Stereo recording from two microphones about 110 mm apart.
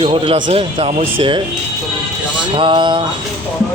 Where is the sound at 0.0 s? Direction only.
50° right (ahead or behind).